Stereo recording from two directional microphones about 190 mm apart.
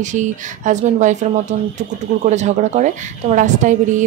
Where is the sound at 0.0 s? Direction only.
40° right (ahead or behind).